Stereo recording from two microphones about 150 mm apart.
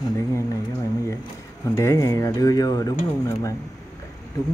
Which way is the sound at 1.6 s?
20° left (ahead or behind).